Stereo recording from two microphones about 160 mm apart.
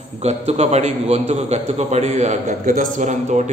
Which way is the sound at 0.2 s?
40° right (ahead or behind).